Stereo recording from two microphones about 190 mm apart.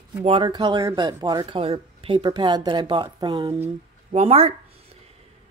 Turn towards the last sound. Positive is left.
turn(degrees=-30)  # may be behind; listen again after turning